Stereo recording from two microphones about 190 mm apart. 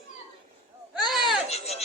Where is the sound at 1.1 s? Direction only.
Centre (ahead or behind).